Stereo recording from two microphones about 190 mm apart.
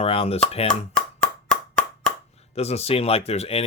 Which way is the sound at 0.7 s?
5° left (ahead or behind).